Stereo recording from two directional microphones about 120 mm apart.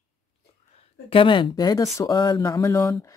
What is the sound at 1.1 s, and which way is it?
Speech, 45° left (ahead or behind).